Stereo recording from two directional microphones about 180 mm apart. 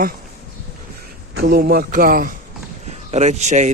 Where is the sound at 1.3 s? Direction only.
60° right (ahead or behind).